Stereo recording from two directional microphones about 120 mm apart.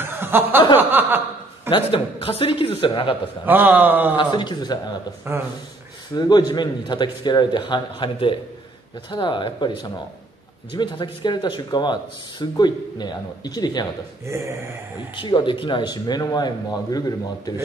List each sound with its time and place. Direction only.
0.0 s a sound: 20° right (ahead or behind)
0.7 s a man's voice: 15° right (ahead or behind)
1.7 s a man's voice: 45° left (ahead or behind)
3.4 s a man's voice: 15° right (ahead or behind)
4.2 s speech: 40° left (ahead or behind)
5.3 s speech: 20° right (ahead or behind)
6.1 s speech: 35° left (ahead or behind)
14.2 s speech: 25° right (ahead or behind)
15.1 s speech: 40° left (ahead or behind)